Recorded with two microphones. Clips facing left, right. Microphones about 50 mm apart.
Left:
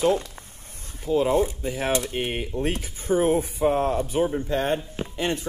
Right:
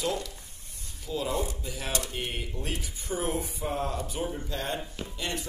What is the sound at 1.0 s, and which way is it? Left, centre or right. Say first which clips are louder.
Speech: left 10 dB; left.